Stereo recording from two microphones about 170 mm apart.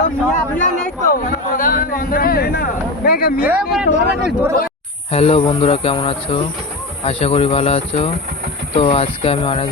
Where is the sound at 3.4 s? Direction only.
10° right (ahead or behind).